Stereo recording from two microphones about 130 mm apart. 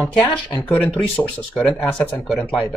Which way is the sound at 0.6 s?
20° left (ahead or behind).